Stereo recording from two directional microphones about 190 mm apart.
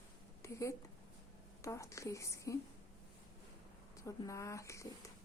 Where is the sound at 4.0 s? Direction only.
15° left (ahead or behind).